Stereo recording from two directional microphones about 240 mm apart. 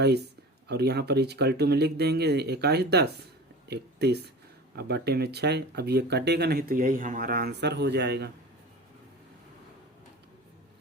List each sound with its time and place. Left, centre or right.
0.7 s speech: right